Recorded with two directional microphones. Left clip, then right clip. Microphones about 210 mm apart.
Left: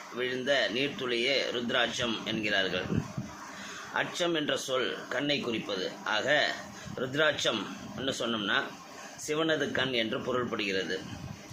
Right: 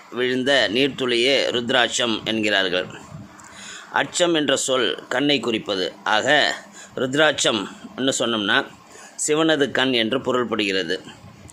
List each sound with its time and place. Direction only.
0.2 s speech: 50° right (ahead or behind)
3.9 s speech: 50° right (ahead or behind)